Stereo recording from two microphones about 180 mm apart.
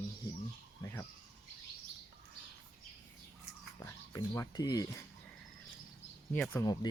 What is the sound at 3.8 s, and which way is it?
Speech, 20° left (ahead or behind).